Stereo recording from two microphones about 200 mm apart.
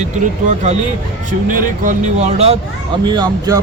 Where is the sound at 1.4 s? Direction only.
40° right (ahead or behind).